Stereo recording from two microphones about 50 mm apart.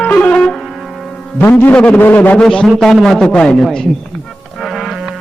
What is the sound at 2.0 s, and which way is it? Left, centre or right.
Speech, left.